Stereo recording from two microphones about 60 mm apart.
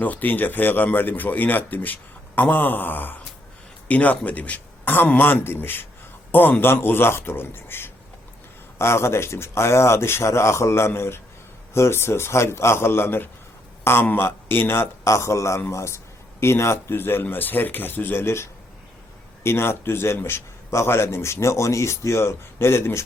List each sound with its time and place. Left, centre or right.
0.0 s speech: left
15.0 s a man's voice: left